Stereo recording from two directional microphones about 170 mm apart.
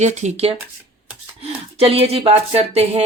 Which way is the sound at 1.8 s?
35° right (ahead or behind).